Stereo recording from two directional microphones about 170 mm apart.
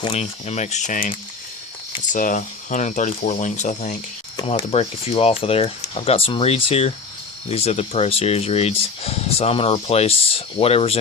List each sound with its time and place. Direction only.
0.0 s speech: 40° left (ahead or behind)
2.1 s speech: 50° left (ahead or behind)
4.4 s speech: 30° left (ahead or behind)